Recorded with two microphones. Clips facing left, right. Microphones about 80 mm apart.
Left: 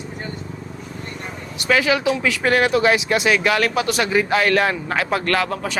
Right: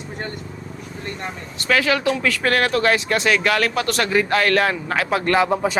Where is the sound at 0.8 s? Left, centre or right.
Right.